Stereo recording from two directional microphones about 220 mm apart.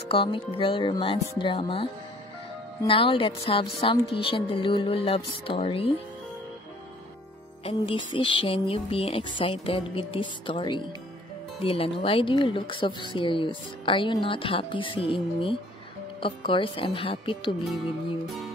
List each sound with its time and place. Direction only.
0.1 s speech: 25° left (ahead or behind)
7.6 s speech: 25° left (ahead or behind)